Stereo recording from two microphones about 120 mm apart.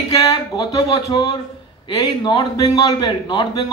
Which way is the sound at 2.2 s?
35° left (ahead or behind).